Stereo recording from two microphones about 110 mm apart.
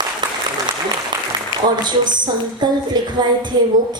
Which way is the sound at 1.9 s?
40° right (ahead or behind).